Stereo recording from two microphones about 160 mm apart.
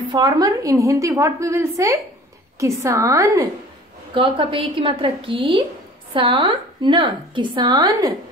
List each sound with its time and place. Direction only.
0.1 s a woman's voice: 25° right (ahead or behind)
4.1 s a woman's voice: 30° right (ahead or behind)